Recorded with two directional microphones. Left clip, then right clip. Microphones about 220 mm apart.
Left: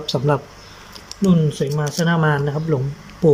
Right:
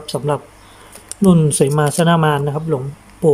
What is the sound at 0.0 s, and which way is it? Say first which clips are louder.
Speech: even; 5° right (ahead or behind).